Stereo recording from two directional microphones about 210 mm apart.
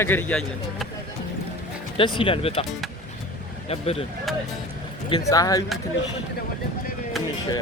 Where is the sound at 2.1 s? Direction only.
25° left (ahead or behind).